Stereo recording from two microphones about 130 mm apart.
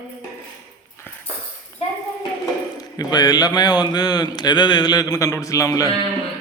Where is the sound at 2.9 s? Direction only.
30° left (ahead or behind).